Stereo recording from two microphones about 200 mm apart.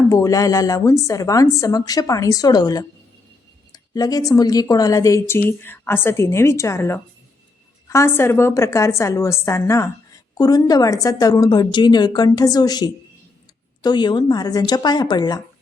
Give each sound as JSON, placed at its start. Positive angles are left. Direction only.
{"t": 0.1, "sound": "a woman's voice", "side_deg": 15}